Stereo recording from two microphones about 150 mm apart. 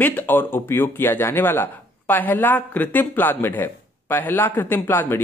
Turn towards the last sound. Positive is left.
turn(degrees=15)  # may be behind; listen again after turning